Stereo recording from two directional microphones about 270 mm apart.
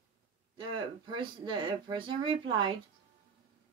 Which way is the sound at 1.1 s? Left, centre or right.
Centre.